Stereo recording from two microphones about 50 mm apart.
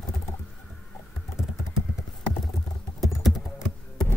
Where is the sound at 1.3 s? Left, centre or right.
Centre.